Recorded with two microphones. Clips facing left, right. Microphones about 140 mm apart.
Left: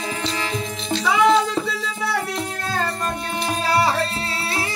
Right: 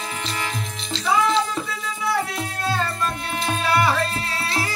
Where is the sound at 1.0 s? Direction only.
90° left.